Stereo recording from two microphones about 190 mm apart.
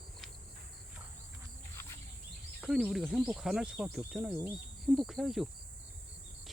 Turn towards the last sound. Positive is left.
turn(degrees=0)  # may be behind; listen again after turning